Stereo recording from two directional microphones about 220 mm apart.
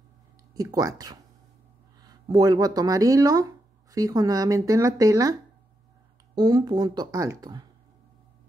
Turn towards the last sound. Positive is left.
turn(degrees=-15)  # may be behind; listen again after turning